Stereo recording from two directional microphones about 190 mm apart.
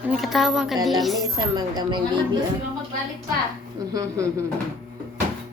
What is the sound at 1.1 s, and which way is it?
A woman's voice, 20° right (ahead or behind).